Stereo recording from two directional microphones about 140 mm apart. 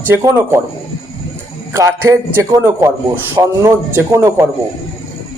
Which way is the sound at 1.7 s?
20° right (ahead or behind).